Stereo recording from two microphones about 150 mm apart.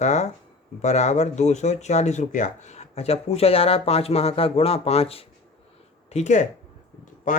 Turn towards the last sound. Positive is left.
turn(degrees=60)  # may be behind; listen again after turning